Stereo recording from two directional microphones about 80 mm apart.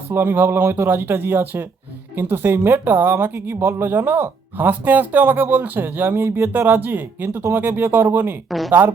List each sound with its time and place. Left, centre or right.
0.1 s speech: right
8.4 s speech: centre